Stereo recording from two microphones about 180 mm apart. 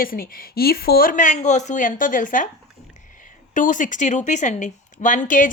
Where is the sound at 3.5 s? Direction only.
45° left (ahead or behind).